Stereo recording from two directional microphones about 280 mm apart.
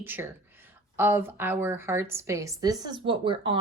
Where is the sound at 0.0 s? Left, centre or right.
Centre.